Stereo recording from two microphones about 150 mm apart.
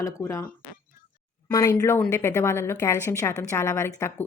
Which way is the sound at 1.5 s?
20° left (ahead or behind).